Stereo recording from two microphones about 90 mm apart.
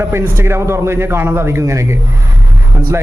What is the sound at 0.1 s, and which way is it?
A man's voice, 30° right (ahead or behind).